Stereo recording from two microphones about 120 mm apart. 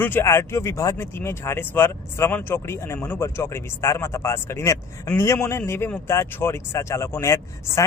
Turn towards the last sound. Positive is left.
turn(degrees=25)  # may be behind; listen again after turning